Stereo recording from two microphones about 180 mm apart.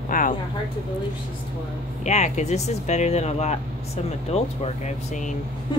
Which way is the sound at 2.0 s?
40° left (ahead or behind).